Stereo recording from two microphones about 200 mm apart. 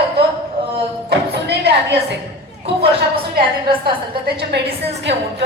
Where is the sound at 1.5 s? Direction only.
55° right (ahead or behind).